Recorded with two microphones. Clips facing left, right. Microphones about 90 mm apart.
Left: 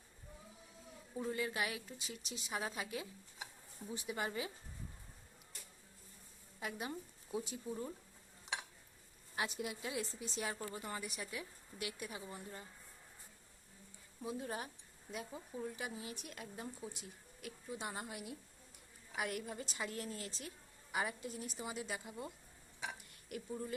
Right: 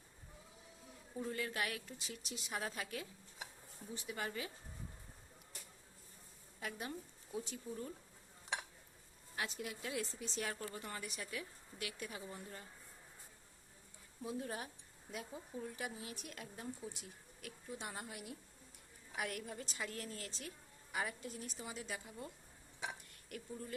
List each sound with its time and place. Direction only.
1.1 s a woman's voice: 10° left (ahead or behind)
6.6 s a woman's voice: 10° left (ahead or behind)
9.3 s a woman's voice: 15° left (ahead or behind)
14.2 s a woman's voice: 5° left (ahead or behind)